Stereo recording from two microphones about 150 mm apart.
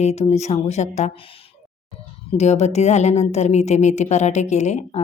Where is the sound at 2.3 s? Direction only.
45° left (ahead or behind).